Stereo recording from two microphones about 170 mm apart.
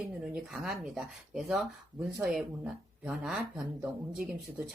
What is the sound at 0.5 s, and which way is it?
Speech, 5° right (ahead or behind).